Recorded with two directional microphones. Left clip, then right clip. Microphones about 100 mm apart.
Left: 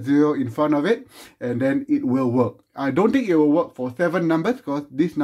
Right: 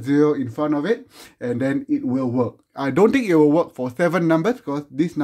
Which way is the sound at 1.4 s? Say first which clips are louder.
Left 1 dB; 25° right (ahead or behind).